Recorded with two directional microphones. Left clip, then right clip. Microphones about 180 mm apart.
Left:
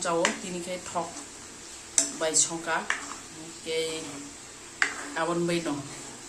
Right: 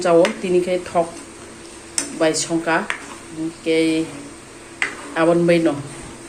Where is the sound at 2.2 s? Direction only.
20° right (ahead or behind).